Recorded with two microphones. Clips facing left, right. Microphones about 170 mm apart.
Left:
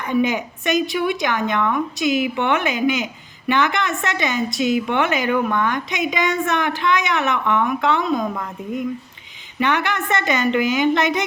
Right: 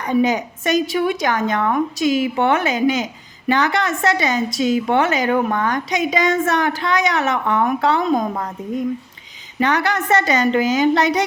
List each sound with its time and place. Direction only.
0.0 s a woman's voice: 40° right (ahead or behind)
9.6 s a woman's voice: 40° right (ahead or behind)